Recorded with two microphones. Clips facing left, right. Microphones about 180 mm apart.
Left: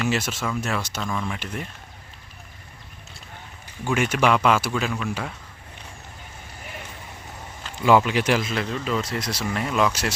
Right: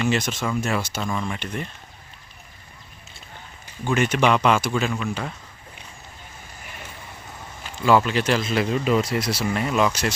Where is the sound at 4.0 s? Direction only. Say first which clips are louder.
Right 1 dB; 5° left (ahead or behind).